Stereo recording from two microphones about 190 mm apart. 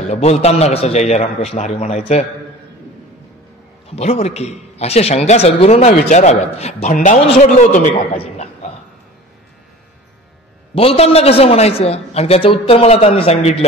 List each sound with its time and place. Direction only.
0.1 s speech: 35° left (ahead or behind)
3.9 s speech: 35° left (ahead or behind)
10.7 s speech: 30° left (ahead or behind)